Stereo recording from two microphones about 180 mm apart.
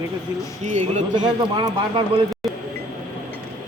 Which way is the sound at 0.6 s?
40° right (ahead or behind).